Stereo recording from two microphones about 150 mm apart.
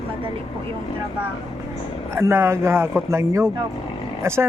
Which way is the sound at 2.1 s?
15° right (ahead or behind).